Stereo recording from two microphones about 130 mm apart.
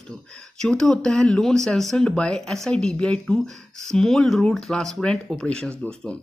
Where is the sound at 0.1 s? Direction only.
5° left (ahead or behind).